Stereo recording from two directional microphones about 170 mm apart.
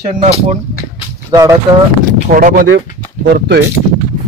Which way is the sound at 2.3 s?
55° right (ahead or behind).